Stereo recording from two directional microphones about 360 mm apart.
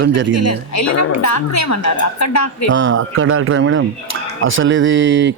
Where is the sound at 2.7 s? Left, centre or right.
Right.